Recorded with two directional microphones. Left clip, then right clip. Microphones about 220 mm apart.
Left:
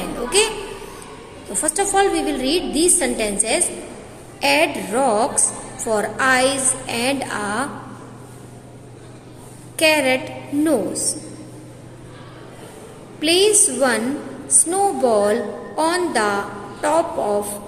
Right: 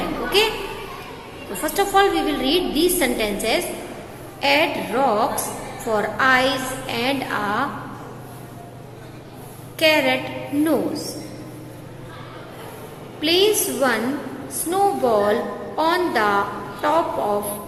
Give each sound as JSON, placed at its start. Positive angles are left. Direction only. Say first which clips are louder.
{"t": 0.3, "sound": "a child's voice", "louder": "even", "side_deg": 25}
{"t": 1.6, "sound": "a woman's voice", "louder": "right 1 dB", "side_deg": 25}
{"t": 9.7, "sound": "a woman's voice", "louder": "left 1 dB", "side_deg": 30}
{"t": 13.2, "sound": "a woman's voice", "louder": "left 2 dB", "side_deg": 30}